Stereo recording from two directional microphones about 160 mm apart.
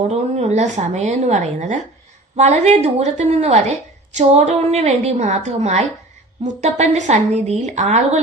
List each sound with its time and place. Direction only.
0.1 s speech: 45° right (ahead or behind)